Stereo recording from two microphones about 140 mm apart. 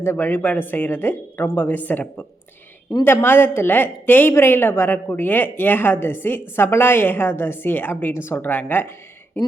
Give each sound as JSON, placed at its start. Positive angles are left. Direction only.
{"t": 0.0, "sound": "a woman's voice", "side_deg": 15}